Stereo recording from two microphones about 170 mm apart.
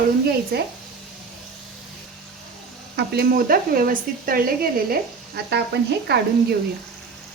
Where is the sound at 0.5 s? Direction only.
65° right (ahead or behind).